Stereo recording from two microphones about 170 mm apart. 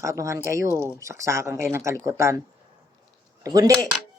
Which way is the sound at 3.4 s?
20° right (ahead or behind).